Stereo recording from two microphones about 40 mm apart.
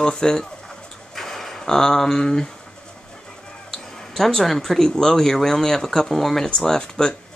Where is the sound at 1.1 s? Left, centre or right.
Centre.